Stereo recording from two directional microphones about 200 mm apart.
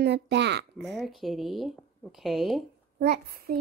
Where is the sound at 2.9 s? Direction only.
50° right (ahead or behind).